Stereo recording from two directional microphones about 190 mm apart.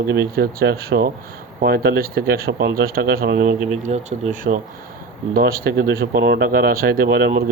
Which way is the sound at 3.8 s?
40° right (ahead or behind).